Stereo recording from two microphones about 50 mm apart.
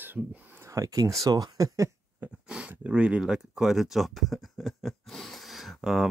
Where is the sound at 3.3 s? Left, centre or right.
Centre.